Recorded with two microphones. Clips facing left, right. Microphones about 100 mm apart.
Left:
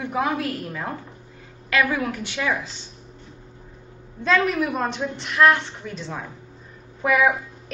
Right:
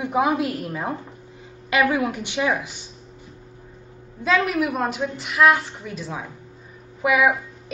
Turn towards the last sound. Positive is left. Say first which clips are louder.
# right 1 dB
turn(degrees=-5)  # may be behind; listen again after turning